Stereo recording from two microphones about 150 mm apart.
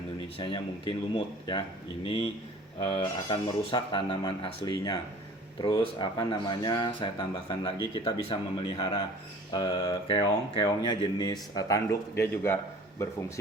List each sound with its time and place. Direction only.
0.3 s speech: 35° left (ahead or behind); by 12.5 s 15° left (ahead or behind)